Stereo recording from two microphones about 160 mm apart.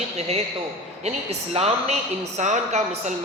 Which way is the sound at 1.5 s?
40° right (ahead or behind).